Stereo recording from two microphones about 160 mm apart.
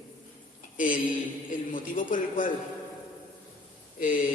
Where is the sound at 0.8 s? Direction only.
55° left (ahead or behind).